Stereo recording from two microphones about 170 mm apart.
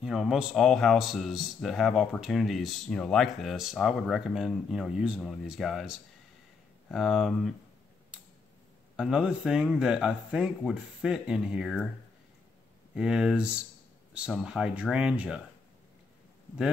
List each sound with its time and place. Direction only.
0.0 s speech: 5° right (ahead or behind)
8.9 s speech: 5° right (ahead or behind)
12.9 s speech: 5° right (ahead or behind)